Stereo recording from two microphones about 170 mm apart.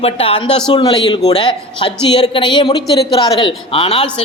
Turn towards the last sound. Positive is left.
turn(degrees=35)  # may be behind; listen again after turning